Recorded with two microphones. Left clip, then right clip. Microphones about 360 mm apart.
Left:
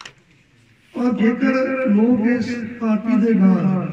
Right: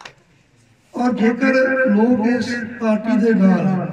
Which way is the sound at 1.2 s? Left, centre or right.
Right.